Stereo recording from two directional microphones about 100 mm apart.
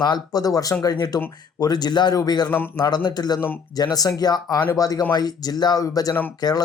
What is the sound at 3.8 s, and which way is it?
Speech, 40° left (ahead or behind).